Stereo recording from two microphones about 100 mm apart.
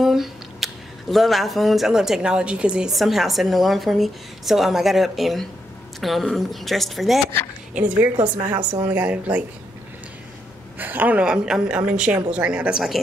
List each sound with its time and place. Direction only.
0.0 s a sound: 5° right (ahead or behind)
1.1 s a woman's voice: centre (ahead or behind)
7.7 s a woman's voice: 15° right (ahead or behind)
10.8 s a woman's voice: 20° right (ahead or behind)